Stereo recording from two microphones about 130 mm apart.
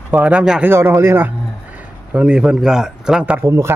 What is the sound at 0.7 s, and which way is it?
Speech, 20° right (ahead or behind).